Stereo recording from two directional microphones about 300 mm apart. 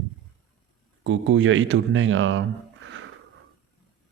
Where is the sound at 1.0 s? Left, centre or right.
Right.